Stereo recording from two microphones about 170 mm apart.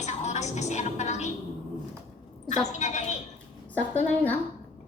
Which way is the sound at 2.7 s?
45° left (ahead or behind).